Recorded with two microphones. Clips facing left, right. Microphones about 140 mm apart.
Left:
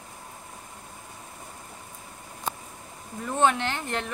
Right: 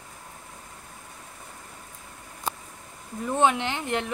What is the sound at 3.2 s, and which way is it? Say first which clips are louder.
Speech: right 1 dB; 15° right (ahead or behind).